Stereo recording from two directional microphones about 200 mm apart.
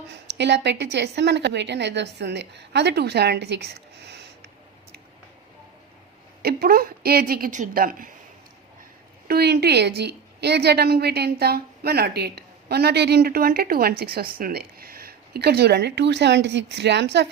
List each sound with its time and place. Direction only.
0.3 s a woman's voice: 60° right (ahead or behind)
6.4 s a woman's voice: 50° right (ahead or behind)
9.2 s a woman's voice: 50° right (ahead or behind)